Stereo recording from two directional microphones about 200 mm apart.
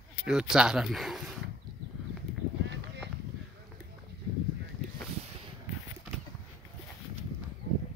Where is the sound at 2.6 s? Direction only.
60° right (ahead or behind).